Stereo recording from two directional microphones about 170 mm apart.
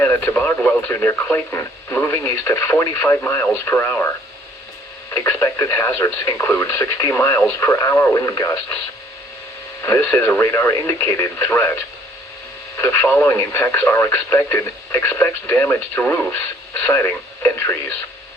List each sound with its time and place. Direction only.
0.0 s speech: 15° left (ahead or behind)
5.1 s speech: 15° left (ahead or behind)
9.8 s speech: 15° left (ahead or behind)